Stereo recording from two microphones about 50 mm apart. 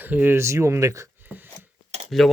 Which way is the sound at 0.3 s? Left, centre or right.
Right.